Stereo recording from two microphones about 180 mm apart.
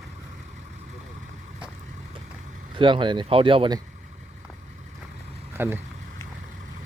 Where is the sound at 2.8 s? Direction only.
25° right (ahead or behind).